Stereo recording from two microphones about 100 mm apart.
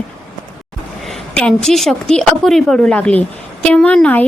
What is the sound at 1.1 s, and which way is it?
A woman's voice, 10° left (ahead or behind).